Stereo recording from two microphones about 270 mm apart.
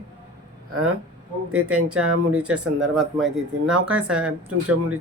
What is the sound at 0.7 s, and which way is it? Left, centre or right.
Speech, right.